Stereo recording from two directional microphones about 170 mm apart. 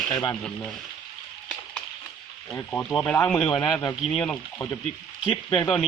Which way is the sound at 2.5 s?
10° left (ahead or behind).